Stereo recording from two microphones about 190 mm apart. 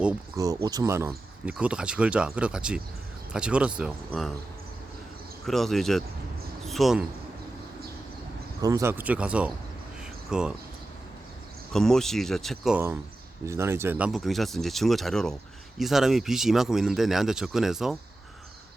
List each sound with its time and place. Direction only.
0.3 s speech: 20° right (ahead or behind); by 4.4 s centre (ahead or behind)
5.5 s speech: centre (ahead or behind)
8.6 s speech: 15° right (ahead or behind)
11.7 s speech: centre (ahead or behind)
13.4 s speech: 15° right (ahead or behind)